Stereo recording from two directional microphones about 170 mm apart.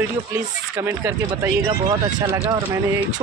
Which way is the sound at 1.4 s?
15° right (ahead or behind).